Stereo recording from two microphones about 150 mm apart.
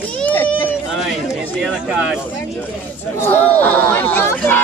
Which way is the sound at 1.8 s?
5° right (ahead or behind).